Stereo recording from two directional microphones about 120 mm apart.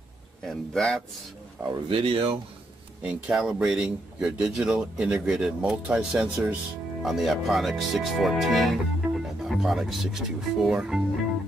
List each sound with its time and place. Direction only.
0.4 s speech: 5° left (ahead or behind)
1.7 s speech: 45° right (ahead or behind)
3.3 s speech: 5° right (ahead or behind)